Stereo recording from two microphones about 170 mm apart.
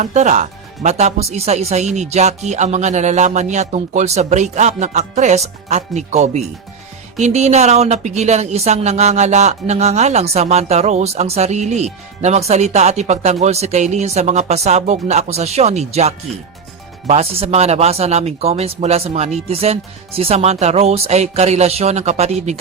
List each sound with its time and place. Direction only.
0.0 s speech: 45° right (ahead or behind)